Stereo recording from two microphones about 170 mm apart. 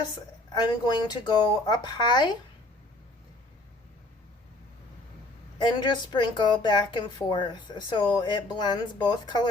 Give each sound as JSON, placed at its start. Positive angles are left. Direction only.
{"t": 0.5, "sound": "speech", "side_deg": 25}
{"t": 5.5, "sound": "speech", "side_deg": 25}